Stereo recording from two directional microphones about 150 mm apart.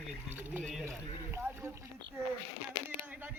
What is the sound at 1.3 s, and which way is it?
Speech, 15° right (ahead or behind).